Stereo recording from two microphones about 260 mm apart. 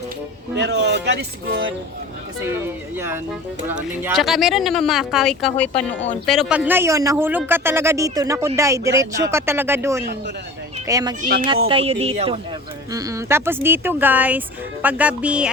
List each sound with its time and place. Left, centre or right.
0.6 s speech: right
2.9 s a man's voice: centre